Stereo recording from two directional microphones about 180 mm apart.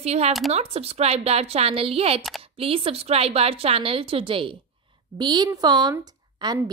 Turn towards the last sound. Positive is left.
turn(degrees=-20)  # may be behind; listen again after turning